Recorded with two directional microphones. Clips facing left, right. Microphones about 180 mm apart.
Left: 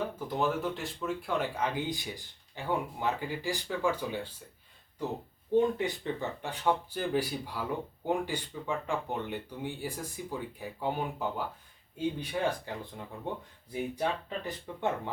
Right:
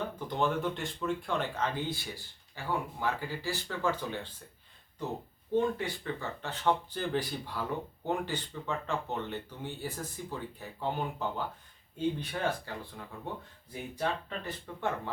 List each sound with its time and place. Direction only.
0.0 s speech: 5° left (ahead or behind)
5.5 s speech: 20° left (ahead or behind)